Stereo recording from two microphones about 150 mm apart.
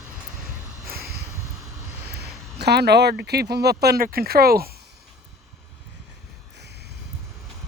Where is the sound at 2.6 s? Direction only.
90° right.